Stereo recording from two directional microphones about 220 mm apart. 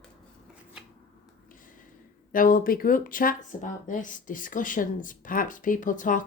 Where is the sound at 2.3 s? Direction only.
40° left (ahead or behind).